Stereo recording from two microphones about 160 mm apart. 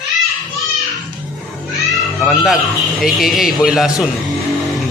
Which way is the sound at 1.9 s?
Centre (ahead or behind).